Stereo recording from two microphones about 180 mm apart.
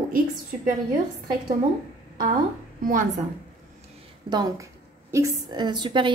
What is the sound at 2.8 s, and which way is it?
Speech, 50° right (ahead or behind).